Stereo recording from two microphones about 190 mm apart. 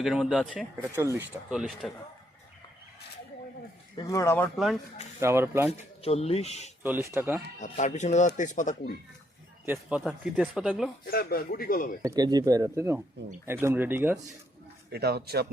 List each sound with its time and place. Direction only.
0.0 s speech: centre (ahead or behind)
0.8 s speech: 15° right (ahead or behind)
1.5 s speech: 5° right (ahead or behind)
3.9 s speech: 15° left (ahead or behind)
4.5 s speech: centre (ahead or behind)
5.2 s speech: 15° right (ahead or behind)
6.0 s speech: 30° left (ahead or behind)
6.8 s speech: 10° right (ahead or behind)
7.6 s speech: 40° left (ahead or behind)
9.7 s speech: centre (ahead or behind)
11.0 s speech: 50° left (ahead or behind)
12.0 s speech: 20° right (ahead or behind)
14.9 s speech: 55° right (ahead or behind)